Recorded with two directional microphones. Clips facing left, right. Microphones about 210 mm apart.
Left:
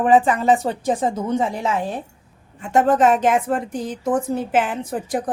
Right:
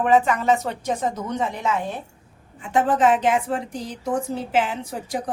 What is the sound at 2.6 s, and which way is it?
A woman's voice, 45° left (ahead or behind).